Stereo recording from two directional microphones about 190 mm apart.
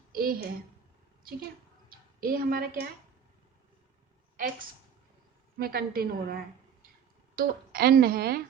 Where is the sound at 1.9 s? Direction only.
50° right (ahead or behind).